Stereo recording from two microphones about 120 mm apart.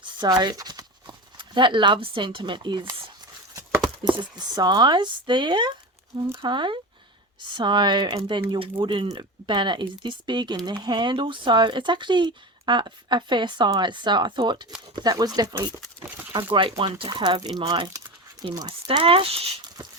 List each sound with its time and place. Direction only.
0.0 s clip-clop: 40° right (ahead or behind)
3.5 s a sound: 25° right (ahead or behind)
4.0 s speech: 40° right (ahead or behind)
16.5 s speech: 45° right (ahead or behind); by 18.5 s 30° right (ahead or behind)
18.7 s speech: 50° right (ahead or behind)